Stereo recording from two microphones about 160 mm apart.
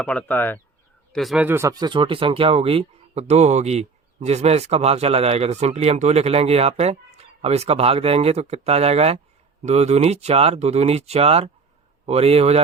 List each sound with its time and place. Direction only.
0.0 s speech: 10° left (ahead or behind)
1.1 s speech: centre (ahead or behind)
1.5 s speech: 15° right (ahead or behind); by 12.6 s 40° right (ahead or behind)